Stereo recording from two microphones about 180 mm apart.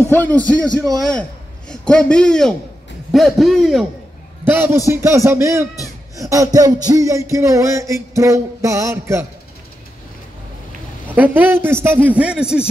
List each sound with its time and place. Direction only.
0.1 s a man's voice: 10° left (ahead or behind)
0.6 s a man's voice: 20° right (ahead or behind)
1.7 s a man's voice: 5° left (ahead or behind)
4.5 s music: 10° right (ahead or behind)
11.1 s music: 10° right (ahead or behind)